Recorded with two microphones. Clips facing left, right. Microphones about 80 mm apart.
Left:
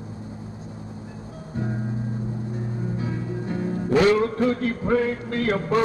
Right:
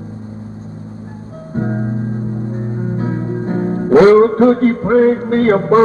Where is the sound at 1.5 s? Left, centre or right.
Right.